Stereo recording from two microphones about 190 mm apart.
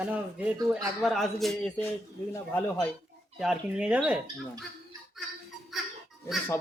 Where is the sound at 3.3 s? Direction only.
5° right (ahead or behind).